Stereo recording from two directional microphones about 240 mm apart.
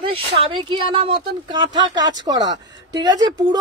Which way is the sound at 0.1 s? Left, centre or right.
Right.